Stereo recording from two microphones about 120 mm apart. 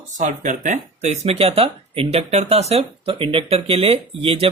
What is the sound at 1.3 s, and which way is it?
Speech, 55° right (ahead or behind).